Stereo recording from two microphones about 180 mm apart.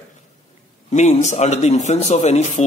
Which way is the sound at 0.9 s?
40° left (ahead or behind).